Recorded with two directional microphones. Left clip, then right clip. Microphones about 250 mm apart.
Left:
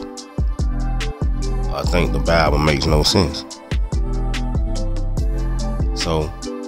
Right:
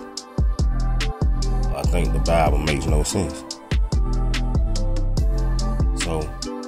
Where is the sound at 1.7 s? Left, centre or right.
Centre.